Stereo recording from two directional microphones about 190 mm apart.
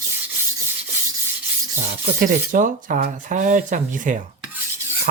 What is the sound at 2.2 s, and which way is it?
Speech, 45° right (ahead or behind).